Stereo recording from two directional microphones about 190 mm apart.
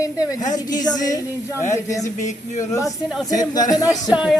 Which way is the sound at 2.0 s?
40° left (ahead or behind).